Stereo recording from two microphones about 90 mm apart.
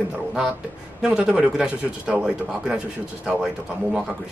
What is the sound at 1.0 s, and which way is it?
Speech, 10° right (ahead or behind).